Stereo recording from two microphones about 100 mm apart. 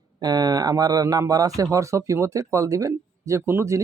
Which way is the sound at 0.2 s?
40° right (ahead or behind).